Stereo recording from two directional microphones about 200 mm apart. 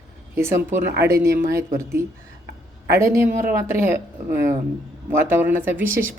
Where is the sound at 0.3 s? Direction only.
15° right (ahead or behind).